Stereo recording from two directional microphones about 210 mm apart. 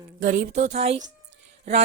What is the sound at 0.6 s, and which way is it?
Speech, 30° right (ahead or behind).